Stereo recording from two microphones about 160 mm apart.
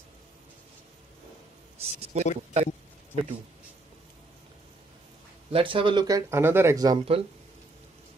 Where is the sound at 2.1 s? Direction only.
40° right (ahead or behind).